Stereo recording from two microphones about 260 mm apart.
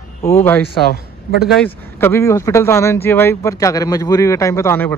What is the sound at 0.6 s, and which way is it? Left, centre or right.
Speech, left.